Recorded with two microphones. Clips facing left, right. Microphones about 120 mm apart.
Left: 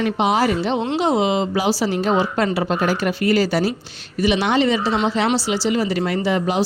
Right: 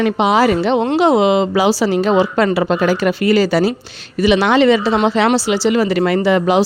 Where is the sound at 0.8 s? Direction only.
50° right (ahead or behind).